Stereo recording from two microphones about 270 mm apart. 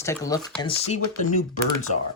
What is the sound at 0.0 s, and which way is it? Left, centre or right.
Speech, centre.